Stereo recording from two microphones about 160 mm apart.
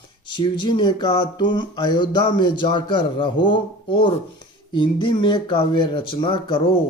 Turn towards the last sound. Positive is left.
turn(degrees=30)  # may be behind; listen again after turning